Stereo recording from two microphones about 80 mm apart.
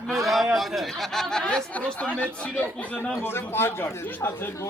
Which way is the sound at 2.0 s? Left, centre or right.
Centre.